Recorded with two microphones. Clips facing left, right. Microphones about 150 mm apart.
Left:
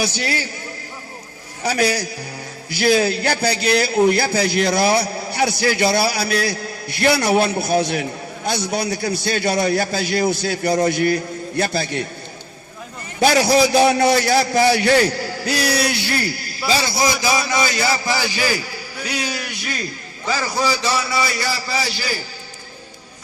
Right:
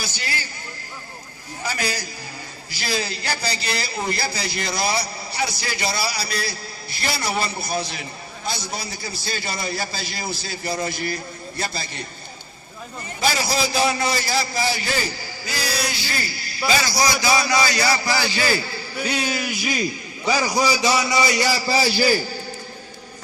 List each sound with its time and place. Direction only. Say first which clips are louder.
0.0 s a man's voice: left 9 dB; 65° left (ahead or behind)
2.7 s a man's voice: left 11 dB; 60° left (ahead or behind)
13.1 s a man's voice: left 8 dB; 65° left (ahead or behind)
16.6 s a man's voice: left 2 dB; 30° left (ahead or behind)
19.0 s a man's voice: right 1 dB; centre (ahead or behind); by 21.5 s 20° right (ahead or behind)
21.7 s a man's voice: right 5 dB; 35° right (ahead or behind)